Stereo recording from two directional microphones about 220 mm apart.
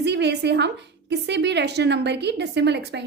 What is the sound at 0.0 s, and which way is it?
A woman's voice, 50° right (ahead or behind).